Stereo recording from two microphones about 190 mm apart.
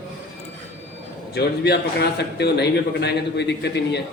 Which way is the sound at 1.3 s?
60° left (ahead or behind).